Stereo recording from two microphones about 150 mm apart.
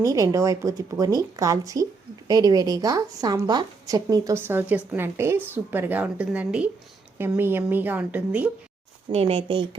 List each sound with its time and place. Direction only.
0.0 s a woman's voice: 20° right (ahead or behind)
9.1 s speech: 40° right (ahead or behind)